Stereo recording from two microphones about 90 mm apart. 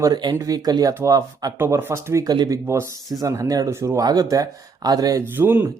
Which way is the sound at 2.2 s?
45° right (ahead or behind).